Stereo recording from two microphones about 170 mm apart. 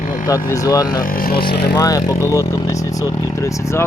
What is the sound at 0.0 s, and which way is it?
Vehicle, 50° left (ahead or behind).